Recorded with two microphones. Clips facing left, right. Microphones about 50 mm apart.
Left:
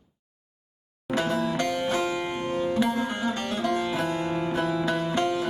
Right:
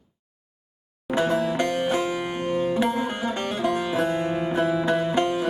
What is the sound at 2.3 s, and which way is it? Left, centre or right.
Music, right.